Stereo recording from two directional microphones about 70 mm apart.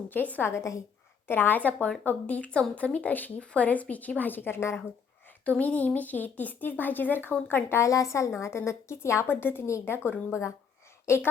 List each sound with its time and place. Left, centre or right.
0.1 s speech: left
0.5 s a woman's voice: left
1.3 s a woman's voice: left
5.5 s speech: left
9.2 s a woman's voice: left